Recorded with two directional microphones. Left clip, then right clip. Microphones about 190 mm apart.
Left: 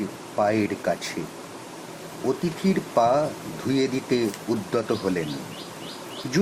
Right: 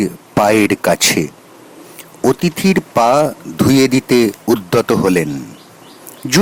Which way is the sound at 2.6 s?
50° right (ahead or behind).